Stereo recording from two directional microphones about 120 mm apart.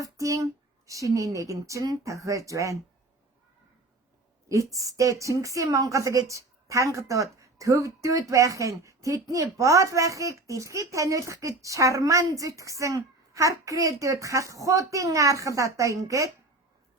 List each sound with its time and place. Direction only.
0.0 s a woman's voice: 30° right (ahead or behind)
4.4 s a woman's voice: 25° right (ahead or behind)